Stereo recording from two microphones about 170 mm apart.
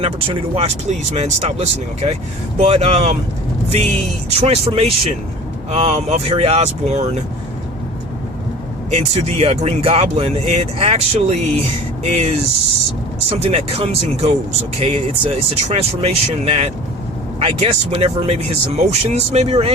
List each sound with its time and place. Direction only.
0.5 s speech: 35° right (ahead or behind)
8.9 s speech: 40° right (ahead or behind)
13.4 s speech: 35° right (ahead or behind)